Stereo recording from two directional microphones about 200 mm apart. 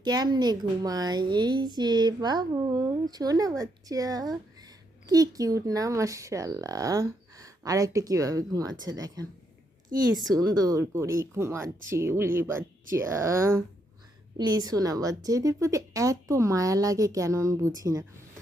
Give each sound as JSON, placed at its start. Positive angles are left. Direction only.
{"t": 0.0, "sound": "a woman's voice", "side_deg": -20}